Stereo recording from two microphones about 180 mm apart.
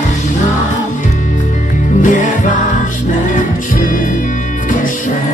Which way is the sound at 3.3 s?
50° left (ahead or behind).